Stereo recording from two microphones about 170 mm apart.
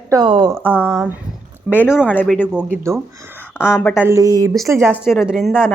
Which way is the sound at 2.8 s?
15° right (ahead or behind).